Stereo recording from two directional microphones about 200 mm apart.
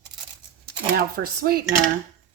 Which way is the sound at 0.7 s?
50° right (ahead or behind).